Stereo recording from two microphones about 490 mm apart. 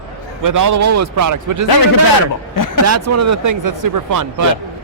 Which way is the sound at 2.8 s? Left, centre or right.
Right.